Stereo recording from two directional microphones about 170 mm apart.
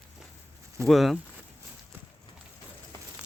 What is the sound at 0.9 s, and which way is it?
Speech, centre (ahead or behind).